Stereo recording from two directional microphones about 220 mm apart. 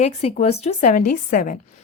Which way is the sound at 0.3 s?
30° left (ahead or behind).